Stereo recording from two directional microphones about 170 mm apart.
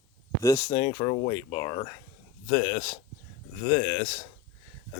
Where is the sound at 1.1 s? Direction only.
45° left (ahead or behind).